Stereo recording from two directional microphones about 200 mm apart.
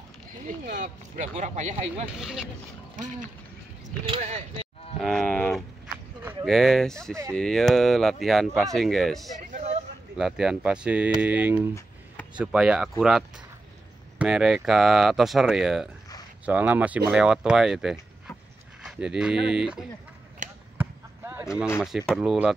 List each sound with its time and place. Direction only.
0.7 s speech: 40° right (ahead or behind)
2.1 s speech: centre (ahead or behind)
4.0 s speech: 30° right (ahead or behind)
5.0 s livestock: 5° left (ahead or behind)
6.4 s speech: centre (ahead or behind)
9.4 s a sound: 35° right (ahead or behind)
10.1 s speech: 5° right (ahead or behind)
14.1 s speech: 5° right (ahead or behind)
20.4 s basketball bounce: 40° right (ahead or behind)
20.7 s basketball bounce: 10° right (ahead or behind)
21.8 s speech: centre (ahead or behind)